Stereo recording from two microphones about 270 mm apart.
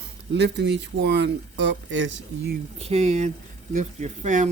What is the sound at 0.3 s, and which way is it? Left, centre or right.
Speech, right.